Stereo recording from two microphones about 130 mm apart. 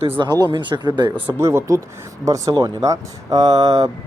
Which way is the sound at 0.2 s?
35° right (ahead or behind).